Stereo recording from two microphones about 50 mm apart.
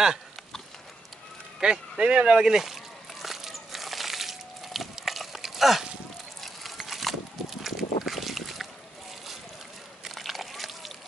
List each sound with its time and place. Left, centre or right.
1.6 s speech: centre
2.4 s a sound: centre
10.0 s slosh: centre